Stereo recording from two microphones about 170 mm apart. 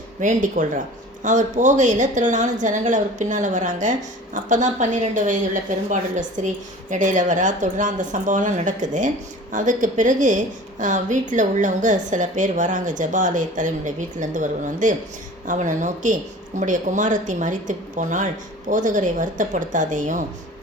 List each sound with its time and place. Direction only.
0.2 s a woman's voice: 50° right (ahead or behind)